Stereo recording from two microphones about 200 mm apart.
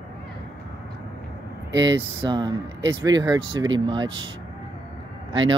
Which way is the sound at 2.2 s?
20° right (ahead or behind).